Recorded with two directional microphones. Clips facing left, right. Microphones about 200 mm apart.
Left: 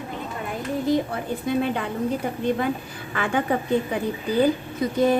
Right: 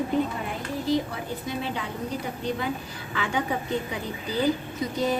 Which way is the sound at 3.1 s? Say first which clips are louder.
Left 4 dB; 55° left (ahead or behind).